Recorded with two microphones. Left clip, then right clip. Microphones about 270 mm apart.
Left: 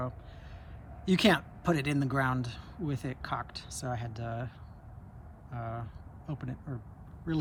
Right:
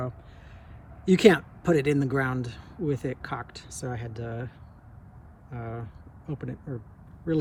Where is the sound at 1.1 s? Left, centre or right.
Centre.